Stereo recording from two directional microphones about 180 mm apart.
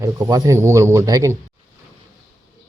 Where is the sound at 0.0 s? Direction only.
20° right (ahead or behind).